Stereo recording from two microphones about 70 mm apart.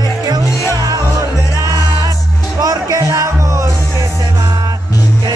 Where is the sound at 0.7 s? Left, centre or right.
Right.